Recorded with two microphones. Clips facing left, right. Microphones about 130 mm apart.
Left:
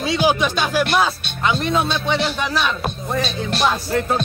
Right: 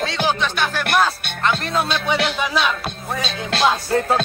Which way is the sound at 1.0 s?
Centre (ahead or behind).